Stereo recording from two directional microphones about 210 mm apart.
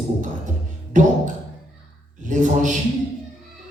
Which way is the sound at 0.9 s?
35° right (ahead or behind).